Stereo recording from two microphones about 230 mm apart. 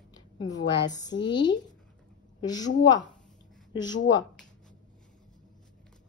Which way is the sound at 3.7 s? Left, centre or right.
Centre.